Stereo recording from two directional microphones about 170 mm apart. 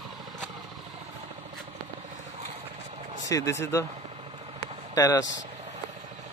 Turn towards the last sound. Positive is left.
turn(degrees=20)  # may be behind; listen again after turning